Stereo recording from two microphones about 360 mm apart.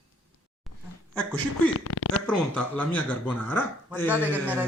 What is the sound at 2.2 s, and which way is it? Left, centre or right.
Speech, centre.